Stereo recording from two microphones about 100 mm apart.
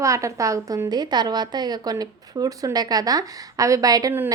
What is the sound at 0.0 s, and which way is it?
A woman's voice, 30° right (ahead or behind).